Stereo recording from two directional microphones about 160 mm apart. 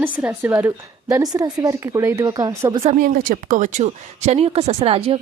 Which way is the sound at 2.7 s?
40° right (ahead or behind).